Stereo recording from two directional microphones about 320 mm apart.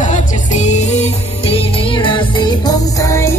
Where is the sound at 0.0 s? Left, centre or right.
Left.